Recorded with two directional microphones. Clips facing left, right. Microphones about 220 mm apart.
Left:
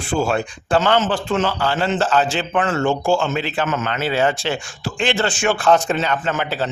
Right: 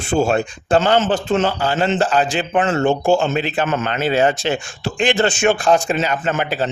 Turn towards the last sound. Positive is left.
turn(degrees=-20)  # may be behind; listen again after turning